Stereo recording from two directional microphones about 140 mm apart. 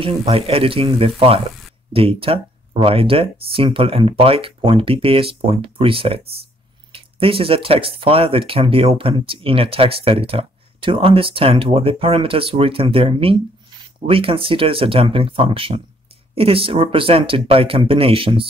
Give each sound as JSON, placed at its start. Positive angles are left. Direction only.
{"t": 0.0, "sound": "speech", "side_deg": -40}